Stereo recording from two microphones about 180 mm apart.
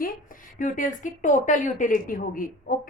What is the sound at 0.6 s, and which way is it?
A woman's voice, 45° left (ahead or behind).